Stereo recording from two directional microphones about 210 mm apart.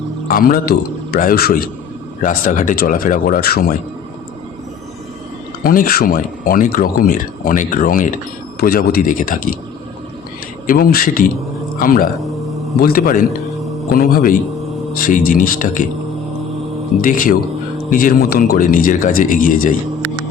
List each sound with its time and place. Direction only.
0.3 s a man's voice: 40° left (ahead or behind)
5.6 s a man's voice: 45° left (ahead or behind)
10.7 s a man's voice: 45° left (ahead or behind)
17.0 s speech: 40° left (ahead or behind)